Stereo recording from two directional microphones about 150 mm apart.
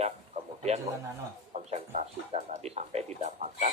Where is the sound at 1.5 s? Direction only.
50° right (ahead or behind).